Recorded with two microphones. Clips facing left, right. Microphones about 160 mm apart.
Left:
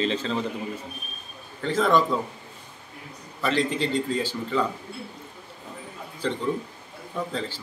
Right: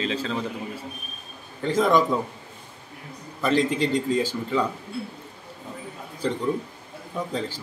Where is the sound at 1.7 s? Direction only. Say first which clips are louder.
Right 1 dB; 10° right (ahead or behind).